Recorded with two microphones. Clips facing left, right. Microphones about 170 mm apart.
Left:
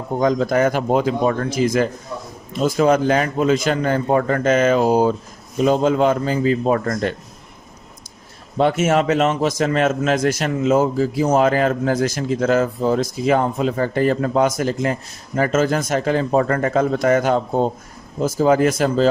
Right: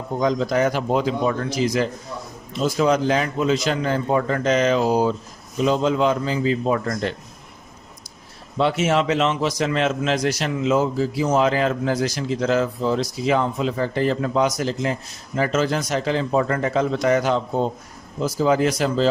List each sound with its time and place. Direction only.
0.2 s a man's voice: 50° left (ahead or behind)
8.5 s a man's voice: 50° left (ahead or behind)